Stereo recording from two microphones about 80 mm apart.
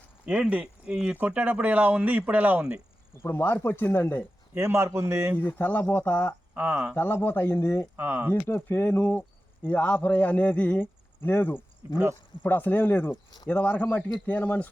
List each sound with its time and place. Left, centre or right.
0.4 s speech: centre
3.2 s a man's voice: left
4.5 s a man's voice: right
5.4 s a man's voice: left
6.5 s speech: right
6.9 s a man's voice: left
7.9 s speech: right
8.3 s a man's voice: left
11.8 s speech: right
12.4 s a man's voice: left